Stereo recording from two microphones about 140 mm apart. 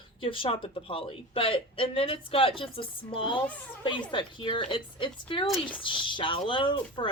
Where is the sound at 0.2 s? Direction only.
40° left (ahead or behind).